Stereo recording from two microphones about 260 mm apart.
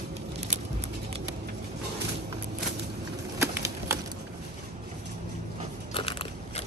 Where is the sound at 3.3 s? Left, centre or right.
Centre.